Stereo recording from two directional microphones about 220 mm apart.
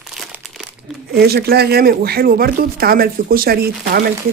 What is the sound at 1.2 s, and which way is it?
Speech, 45° right (ahead or behind).